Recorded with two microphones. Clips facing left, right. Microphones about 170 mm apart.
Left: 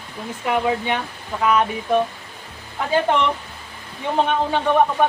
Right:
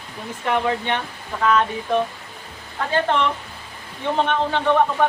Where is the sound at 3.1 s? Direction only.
10° left (ahead or behind).